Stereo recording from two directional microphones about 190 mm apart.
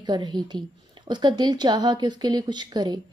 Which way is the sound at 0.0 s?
25° right (ahead or behind).